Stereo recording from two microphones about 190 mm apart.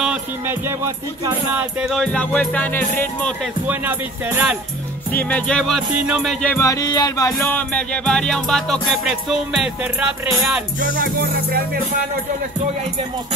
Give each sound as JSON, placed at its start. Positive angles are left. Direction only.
{"t": 0.0, "sound": "music", "side_deg": -10}
{"t": 1.8, "sound": "music", "side_deg": 0}
{"t": 3.6, "sound": "music", "side_deg": -10}
{"t": 5.1, "sound": "music", "side_deg": 10}
{"t": 6.4, "sound": "music", "side_deg": 15}
{"t": 7.3, "sound": "music", "side_deg": 10}
{"t": 11.0, "sound": "music", "side_deg": -55}